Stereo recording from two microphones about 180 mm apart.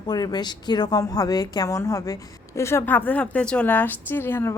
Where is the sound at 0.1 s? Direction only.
20° left (ahead or behind).